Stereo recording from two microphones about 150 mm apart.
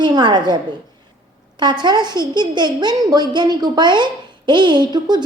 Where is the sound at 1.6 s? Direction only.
30° right (ahead or behind).